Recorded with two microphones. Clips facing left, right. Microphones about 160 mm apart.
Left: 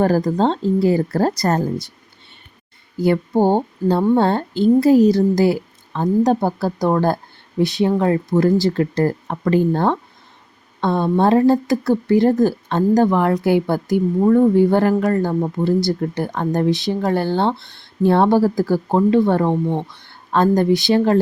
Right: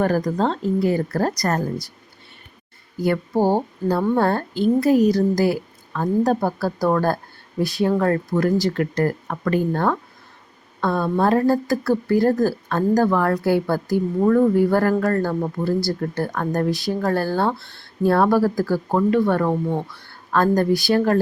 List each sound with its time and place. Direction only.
0.0 s speech: 30° left (ahead or behind)
3.0 s speech: 25° left (ahead or behind)